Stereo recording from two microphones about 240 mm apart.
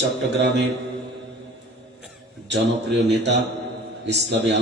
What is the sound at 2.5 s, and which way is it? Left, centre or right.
Speech, right.